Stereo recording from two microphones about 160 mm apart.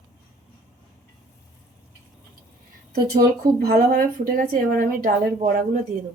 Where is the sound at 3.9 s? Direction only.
60° right (ahead or behind).